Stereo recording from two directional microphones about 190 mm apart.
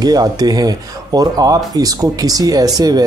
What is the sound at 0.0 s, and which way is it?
Speech, 20° right (ahead or behind).